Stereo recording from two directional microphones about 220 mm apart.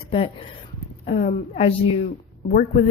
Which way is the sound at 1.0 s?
35° left (ahead or behind).